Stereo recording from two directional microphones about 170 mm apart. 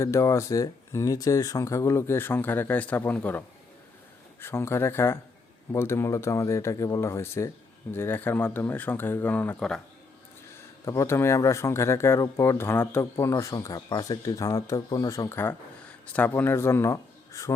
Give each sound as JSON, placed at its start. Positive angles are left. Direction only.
{"t": 0.0, "sound": "speech", "side_deg": 15}
{"t": 10.8, "sound": "speech", "side_deg": 15}